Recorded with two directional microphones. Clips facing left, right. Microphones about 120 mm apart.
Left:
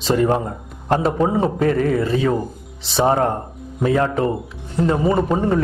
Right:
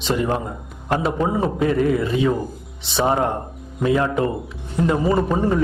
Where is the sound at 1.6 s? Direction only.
45° left (ahead or behind).